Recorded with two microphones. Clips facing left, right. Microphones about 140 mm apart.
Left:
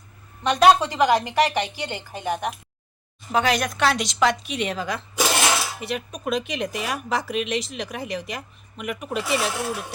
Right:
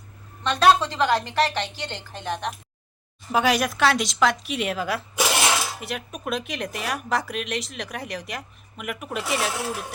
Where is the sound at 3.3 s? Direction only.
5° right (ahead or behind).